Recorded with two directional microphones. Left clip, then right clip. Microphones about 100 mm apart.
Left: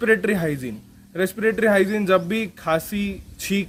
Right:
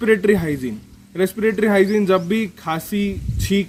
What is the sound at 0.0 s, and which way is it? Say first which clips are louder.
Speech: right 3 dB; 35° left (ahead or behind).